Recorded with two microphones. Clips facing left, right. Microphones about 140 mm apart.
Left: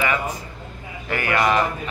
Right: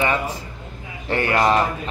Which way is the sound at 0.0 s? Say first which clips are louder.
Right 1 dB; 30° right (ahead or behind).